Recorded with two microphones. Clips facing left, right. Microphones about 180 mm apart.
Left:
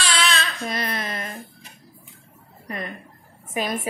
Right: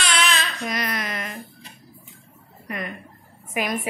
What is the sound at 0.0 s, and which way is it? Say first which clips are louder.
Baby cry: even; 30° left (ahead or behind).